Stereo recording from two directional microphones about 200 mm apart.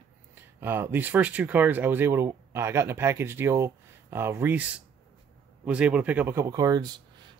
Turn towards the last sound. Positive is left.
turn(degrees=-15)  # may be behind; listen again after turning